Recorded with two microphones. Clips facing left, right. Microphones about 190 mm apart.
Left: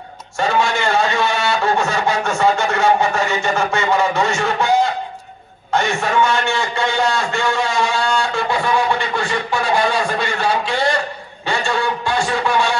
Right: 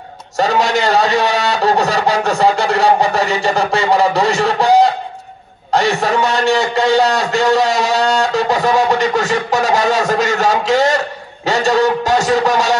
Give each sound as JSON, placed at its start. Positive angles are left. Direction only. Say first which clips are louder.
{"t": 0.4, "sound": "a man's voice", "louder": "right 4 dB", "side_deg": -40}